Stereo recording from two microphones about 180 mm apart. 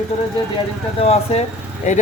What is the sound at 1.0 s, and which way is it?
Speech, 35° left (ahead or behind).